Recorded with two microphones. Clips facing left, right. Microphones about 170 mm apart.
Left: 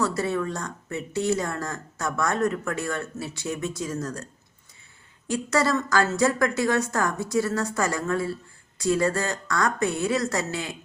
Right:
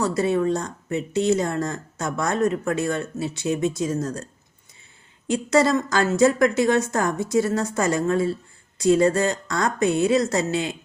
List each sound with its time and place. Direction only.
0.0 s speech: 20° right (ahead or behind)
5.3 s speech: 20° right (ahead or behind)